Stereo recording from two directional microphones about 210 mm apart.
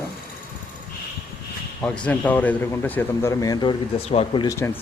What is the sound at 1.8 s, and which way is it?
Speech, 5° left (ahead or behind).